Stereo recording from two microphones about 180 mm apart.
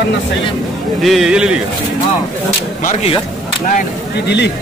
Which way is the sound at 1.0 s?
Centre (ahead or behind).